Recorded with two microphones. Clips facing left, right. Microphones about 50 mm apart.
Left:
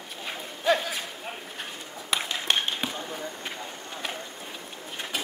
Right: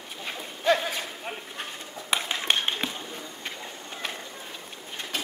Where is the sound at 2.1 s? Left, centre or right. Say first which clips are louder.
Right 1 dB; centre.